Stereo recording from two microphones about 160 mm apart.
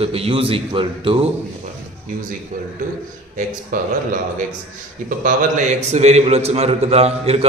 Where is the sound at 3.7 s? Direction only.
55° right (ahead or behind).